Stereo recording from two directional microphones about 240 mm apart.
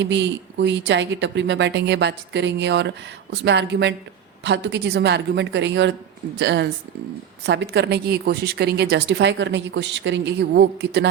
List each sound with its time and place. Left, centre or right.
0.0 s a woman's voice: right